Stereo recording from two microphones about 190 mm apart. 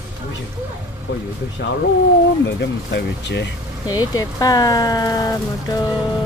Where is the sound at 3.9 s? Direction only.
20° left (ahead or behind).